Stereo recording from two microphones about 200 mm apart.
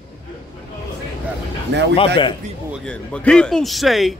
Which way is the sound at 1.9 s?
25° left (ahead or behind).